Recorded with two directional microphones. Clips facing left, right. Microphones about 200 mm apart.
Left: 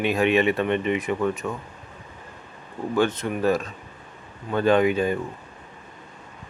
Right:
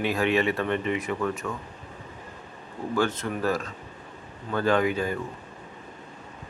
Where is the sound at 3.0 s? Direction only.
20° left (ahead or behind).